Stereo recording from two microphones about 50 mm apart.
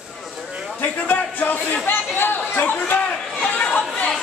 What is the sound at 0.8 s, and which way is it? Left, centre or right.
Chatter, left.